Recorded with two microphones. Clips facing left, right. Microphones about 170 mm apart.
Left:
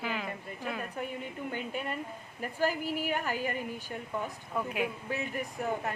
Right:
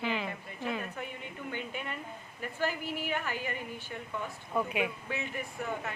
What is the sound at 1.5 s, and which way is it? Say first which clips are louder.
Speech: left 2 dB; 40° left (ahead or behind).